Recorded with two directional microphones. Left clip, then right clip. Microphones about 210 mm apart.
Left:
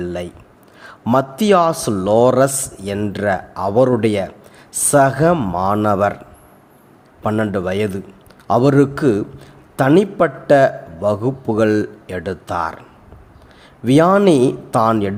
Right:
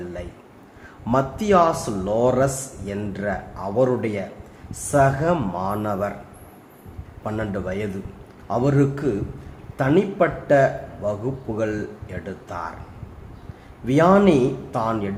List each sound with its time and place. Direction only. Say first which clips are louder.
1.0 s a man's voice: left 6 dB; 40° left (ahead or behind)
7.2 s a man's voice: left 8 dB; 35° left (ahead or behind)
13.8 s a man's voice: left 4 dB; 40° left (ahead or behind)